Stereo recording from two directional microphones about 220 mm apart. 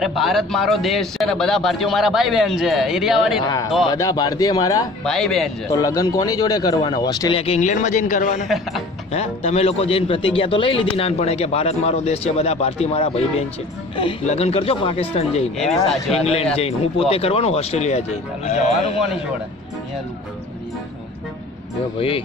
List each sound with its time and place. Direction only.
0.0 s a man's voice: centre (ahead or behind)
3.9 s speech: 15° left (ahead or behind)
5.0 s a man's voice: centre (ahead or behind)
5.7 s a man's voice: 15° left (ahead or behind)
15.5 s a man's voice: centre (ahead or behind)
17.1 s a man's voice: 25° left (ahead or behind)
21.9 s a man's voice: 25° left (ahead or behind)